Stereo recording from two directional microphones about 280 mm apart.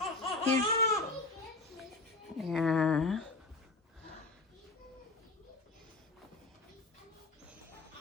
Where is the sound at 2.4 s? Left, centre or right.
Centre.